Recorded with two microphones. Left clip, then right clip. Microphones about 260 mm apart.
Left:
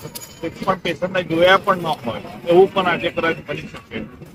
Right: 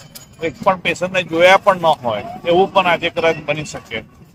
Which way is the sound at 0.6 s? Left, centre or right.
Right.